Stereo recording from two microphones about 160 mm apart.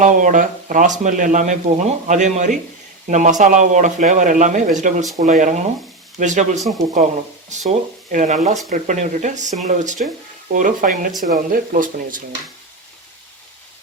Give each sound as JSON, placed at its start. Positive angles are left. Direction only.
{"t": 0.0, "sound": "speech", "side_deg": -55}